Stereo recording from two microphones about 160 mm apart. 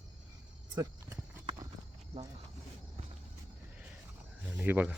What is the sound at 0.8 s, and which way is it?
Clip-clop, 25° right (ahead or behind).